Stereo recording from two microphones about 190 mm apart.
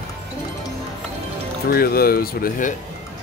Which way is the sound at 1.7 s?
50° left (ahead or behind).